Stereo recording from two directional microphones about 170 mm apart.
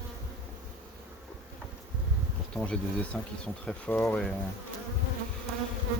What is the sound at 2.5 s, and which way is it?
Speech, 5° left (ahead or behind).